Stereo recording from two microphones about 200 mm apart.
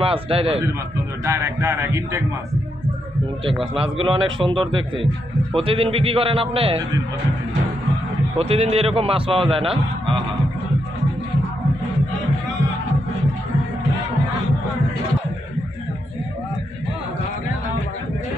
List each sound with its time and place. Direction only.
0.0 s a man's voice: 30° right (ahead or behind)
1.2 s speech: 15° right (ahead or behind)
3.4 s a man's voice: 25° right (ahead or behind)
8.4 s a man's voice: 30° right (ahead or behind)